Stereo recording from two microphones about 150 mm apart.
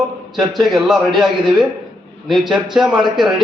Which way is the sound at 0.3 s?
Centre (ahead or behind).